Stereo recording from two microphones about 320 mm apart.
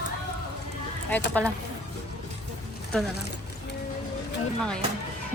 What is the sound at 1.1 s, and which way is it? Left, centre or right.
Speech, centre.